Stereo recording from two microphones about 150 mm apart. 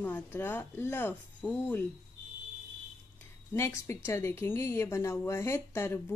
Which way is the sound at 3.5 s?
20° left (ahead or behind).